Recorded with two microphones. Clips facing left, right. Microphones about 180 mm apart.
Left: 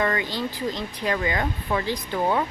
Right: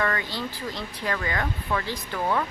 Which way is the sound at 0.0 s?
20° left (ahead or behind).